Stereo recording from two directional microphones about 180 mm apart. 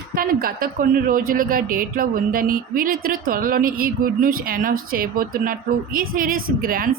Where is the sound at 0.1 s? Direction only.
55° right (ahead or behind).